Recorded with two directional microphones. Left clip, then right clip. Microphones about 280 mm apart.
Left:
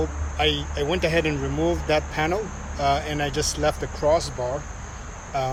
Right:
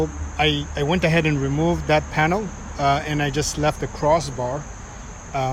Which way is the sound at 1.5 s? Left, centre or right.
Left.